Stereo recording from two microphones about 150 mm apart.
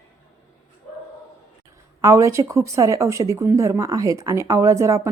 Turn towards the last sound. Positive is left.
turn(degrees=-20)  # may be behind; listen again after turning